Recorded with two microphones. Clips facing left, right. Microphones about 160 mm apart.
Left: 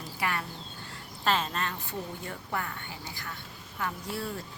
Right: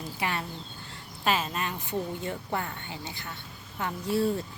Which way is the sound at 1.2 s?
10° right (ahead or behind).